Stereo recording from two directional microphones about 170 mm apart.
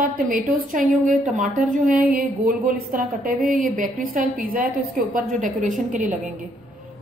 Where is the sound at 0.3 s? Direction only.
55° right (ahead or behind).